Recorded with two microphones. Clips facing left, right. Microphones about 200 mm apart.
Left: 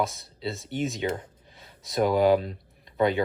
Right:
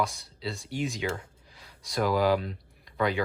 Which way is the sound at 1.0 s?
25° left (ahead or behind).